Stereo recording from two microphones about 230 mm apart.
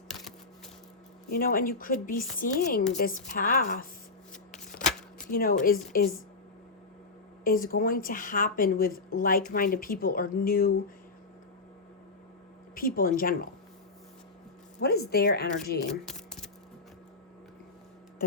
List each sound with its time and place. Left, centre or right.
0.1 s a sound: centre
1.3 s a woman's voice: left
5.3 s a woman's voice: left
7.4 s a woman's voice: left
12.7 s a woman's voice: left
14.8 s speech: left
15.9 s shuffling cards: centre